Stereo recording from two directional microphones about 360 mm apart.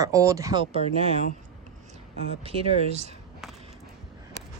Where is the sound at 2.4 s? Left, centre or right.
Centre.